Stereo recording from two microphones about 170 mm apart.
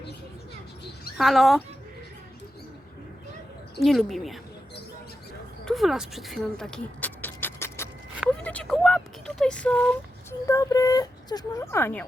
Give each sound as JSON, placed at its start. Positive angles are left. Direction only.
{"t": 1.2, "sound": "speech", "side_deg": 0}
{"t": 3.8, "sound": "speech", "side_deg": 0}
{"t": 5.6, "sound": "a sound", "side_deg": 0}
{"t": 8.4, "sound": "speech", "side_deg": 5}
{"t": 10.4, "sound": "speech", "side_deg": 20}